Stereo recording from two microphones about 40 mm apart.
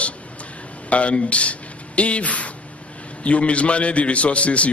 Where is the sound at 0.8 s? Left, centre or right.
Left.